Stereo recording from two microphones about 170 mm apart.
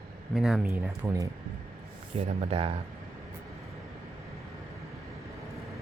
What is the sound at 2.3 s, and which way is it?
Speech, 40° right (ahead or behind).